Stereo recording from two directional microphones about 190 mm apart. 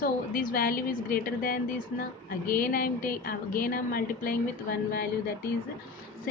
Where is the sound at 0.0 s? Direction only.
50° left (ahead or behind).